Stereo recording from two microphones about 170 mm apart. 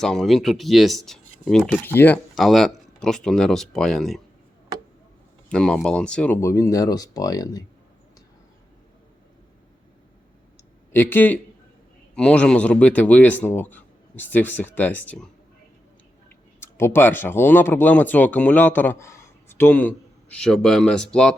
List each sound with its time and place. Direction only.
0.0 s speech: centre (ahead or behind)
2.3 s speech: centre (ahead or behind)
5.5 s speech: 5° left (ahead or behind); by 7.6 s 20° left (ahead or behind)
10.9 s speech: 10° left (ahead or behind)
16.6 s speech: 15° left (ahead or behind)